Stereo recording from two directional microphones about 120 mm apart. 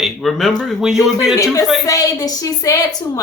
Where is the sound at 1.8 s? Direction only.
30° left (ahead or behind).